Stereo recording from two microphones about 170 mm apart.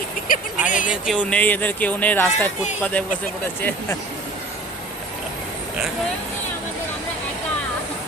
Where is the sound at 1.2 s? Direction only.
10° left (ahead or behind).